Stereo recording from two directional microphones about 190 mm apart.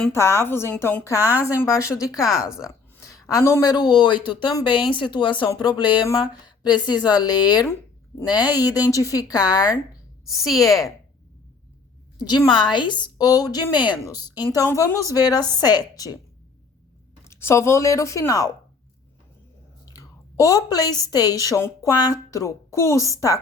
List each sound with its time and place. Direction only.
0.0 s a woman's voice: 15° left (ahead or behind)
1.2 s a woman's voice: 10° right (ahead or behind)
1.5 s a woman's voice: 15° left (ahead or behind)
2.6 s a sound: 15° left (ahead or behind)
3.3 s speech: 15° left (ahead or behind)
12.3 s speech: 25° left (ahead or behind)
17.2 s a woman's voice: 15° left (ahead or behind)
19.9 s a woman's voice: 15° left (ahead or behind)